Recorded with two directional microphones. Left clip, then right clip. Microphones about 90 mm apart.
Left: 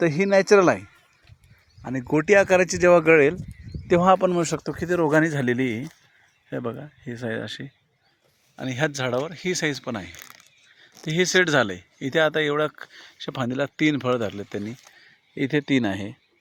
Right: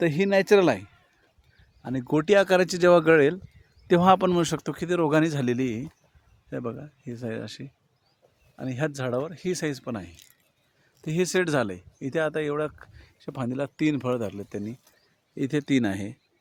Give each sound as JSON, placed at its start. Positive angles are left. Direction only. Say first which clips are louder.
{"t": 0.0, "sound": "speech", "louder": "left 3 dB", "side_deg": 0}
{"t": 3.9, "sound": "speech", "louder": "left 2 dB", "side_deg": -40}
{"t": 4.4, "sound": "speech", "louder": "left 2 dB", "side_deg": -25}
{"t": 4.7, "sound": "speech", "louder": "left 3 dB", "side_deg": 0}
{"t": 5.5, "sound": "speech", "louder": "left 3 dB", "side_deg": 20}
{"t": 6.5, "sound": "speech", "louder": "left 3 dB", "side_deg": 30}
{"t": 11.9, "sound": "speech", "louder": "left 6 dB", "side_deg": 40}
{"t": 15.4, "sound": "speech", "louder": "left 3 dB", "side_deg": 0}